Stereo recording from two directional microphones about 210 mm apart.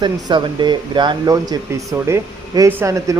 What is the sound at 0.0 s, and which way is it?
Speech, 20° right (ahead or behind).